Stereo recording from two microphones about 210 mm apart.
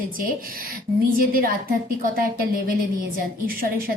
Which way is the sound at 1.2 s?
45° right (ahead or behind).